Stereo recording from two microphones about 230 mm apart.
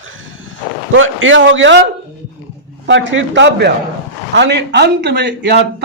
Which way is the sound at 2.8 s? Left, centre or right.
Right.